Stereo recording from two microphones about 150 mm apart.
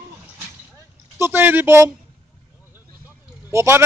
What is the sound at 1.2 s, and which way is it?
Speech, 15° right (ahead or behind).